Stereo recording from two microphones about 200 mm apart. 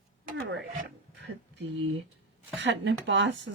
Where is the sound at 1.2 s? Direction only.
60° right (ahead or behind).